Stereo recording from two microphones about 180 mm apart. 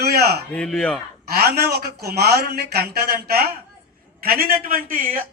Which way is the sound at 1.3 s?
65° right (ahead or behind).